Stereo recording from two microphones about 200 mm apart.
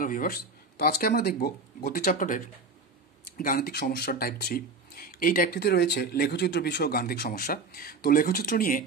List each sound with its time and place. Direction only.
0.0 s speech: 45° left (ahead or behind)